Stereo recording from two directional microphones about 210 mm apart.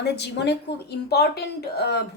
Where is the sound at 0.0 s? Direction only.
55° left (ahead or behind).